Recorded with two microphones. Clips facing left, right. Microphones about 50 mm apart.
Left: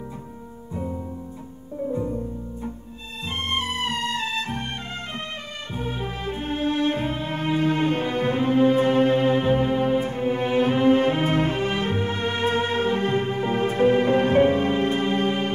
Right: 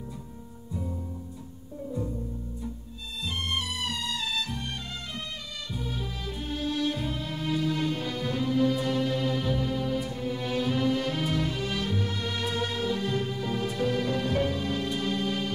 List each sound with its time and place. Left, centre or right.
1.9 s music: left
3.3 s music: left
5.7 s music: left